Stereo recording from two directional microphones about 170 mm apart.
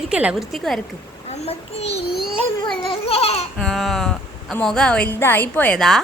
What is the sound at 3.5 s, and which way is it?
A woman's voice, centre (ahead or behind).